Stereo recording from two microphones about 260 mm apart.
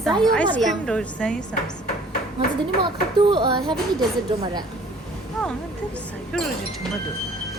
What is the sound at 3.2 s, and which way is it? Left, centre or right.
Speech, centre.